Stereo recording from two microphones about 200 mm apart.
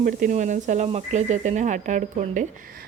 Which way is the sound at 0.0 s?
40° right (ahead or behind).